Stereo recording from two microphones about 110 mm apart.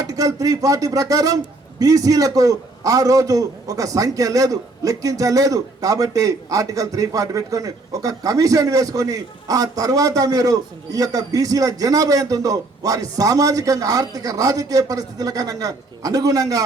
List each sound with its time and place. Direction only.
0.0 s a man's voice: 35° right (ahead or behind)